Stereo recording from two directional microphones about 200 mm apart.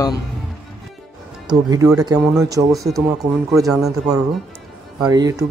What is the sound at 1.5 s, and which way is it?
Speech, 20° right (ahead or behind).